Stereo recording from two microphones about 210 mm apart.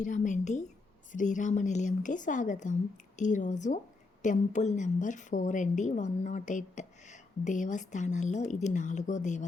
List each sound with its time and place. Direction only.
0.0 s a woman's voice: 35° left (ahead or behind)